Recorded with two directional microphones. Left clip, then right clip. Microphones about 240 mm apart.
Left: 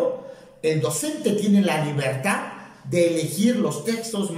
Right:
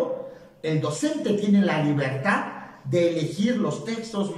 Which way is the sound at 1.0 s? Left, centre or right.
Centre.